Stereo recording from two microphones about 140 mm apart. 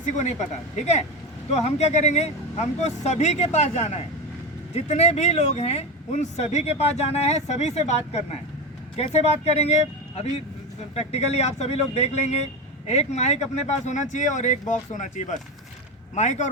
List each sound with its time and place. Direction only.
0.0 s speech: 55° left (ahead or behind)
10.9 s speech: 50° left (ahead or behind)